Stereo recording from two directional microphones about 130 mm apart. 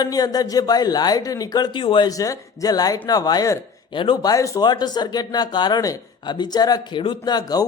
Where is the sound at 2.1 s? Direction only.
25° left (ahead or behind).